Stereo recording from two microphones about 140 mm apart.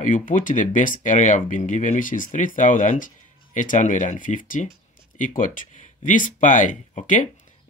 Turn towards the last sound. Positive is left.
turn(degrees=65)  # may be behind; listen again after turning